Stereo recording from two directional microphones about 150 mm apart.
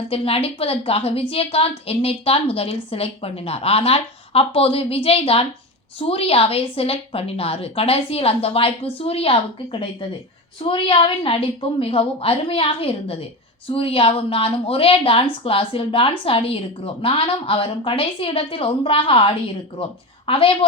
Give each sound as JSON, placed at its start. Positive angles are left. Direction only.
{"t": 0.1, "sound": "a woman's voice", "side_deg": 40}